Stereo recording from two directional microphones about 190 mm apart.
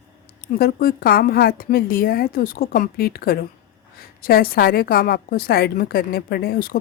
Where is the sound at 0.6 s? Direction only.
50° left (ahead or behind).